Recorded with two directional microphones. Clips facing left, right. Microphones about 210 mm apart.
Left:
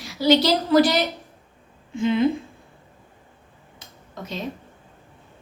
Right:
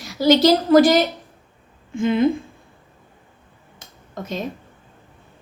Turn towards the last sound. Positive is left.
turn(degrees=-50)  # may be behind; listen again after turning